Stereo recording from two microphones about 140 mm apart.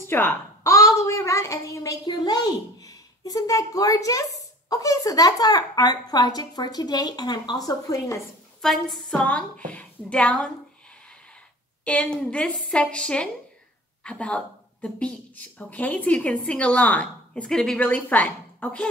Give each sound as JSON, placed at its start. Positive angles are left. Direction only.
{"t": 0.0, "sound": "a woman's voice", "side_deg": 15}
{"t": 8.5, "sound": "speech", "side_deg": 5}
{"t": 11.8, "sound": "speech", "side_deg": 10}